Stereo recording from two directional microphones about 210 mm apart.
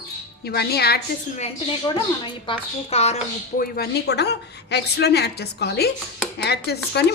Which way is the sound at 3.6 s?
50° left (ahead or behind).